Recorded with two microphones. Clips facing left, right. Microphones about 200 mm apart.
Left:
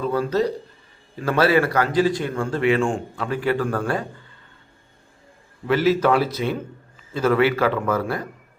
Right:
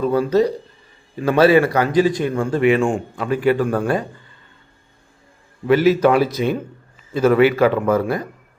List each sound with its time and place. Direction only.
0.1 s a man's voice: 15° right (ahead or behind)
5.6 s a man's voice: 15° right (ahead or behind)